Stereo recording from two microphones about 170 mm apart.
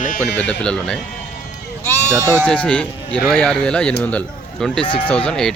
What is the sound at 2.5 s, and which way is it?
Speech, 5° left (ahead or behind).